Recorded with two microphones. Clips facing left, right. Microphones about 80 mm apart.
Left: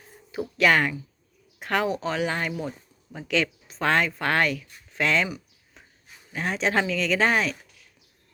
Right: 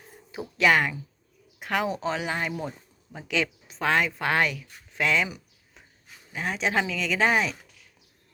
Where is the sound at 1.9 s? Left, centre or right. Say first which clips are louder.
Left 2 dB; centre.